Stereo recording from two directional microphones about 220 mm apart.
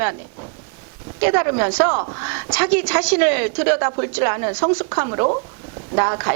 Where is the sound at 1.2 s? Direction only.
20° right (ahead or behind).